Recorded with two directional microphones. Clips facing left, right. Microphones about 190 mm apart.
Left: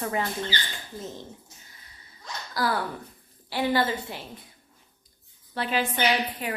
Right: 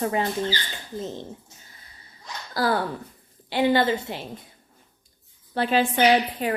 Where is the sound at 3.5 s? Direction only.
20° right (ahead or behind).